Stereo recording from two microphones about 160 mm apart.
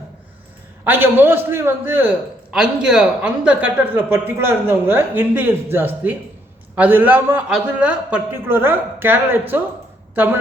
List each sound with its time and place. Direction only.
0.9 s a man's voice: 15° right (ahead or behind)